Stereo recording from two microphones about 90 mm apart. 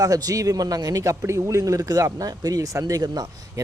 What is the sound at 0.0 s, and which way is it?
Speech, 45° right (ahead or behind).